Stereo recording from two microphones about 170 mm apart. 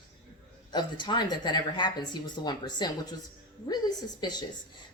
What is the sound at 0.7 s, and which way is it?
A woman's voice, 25° left (ahead or behind).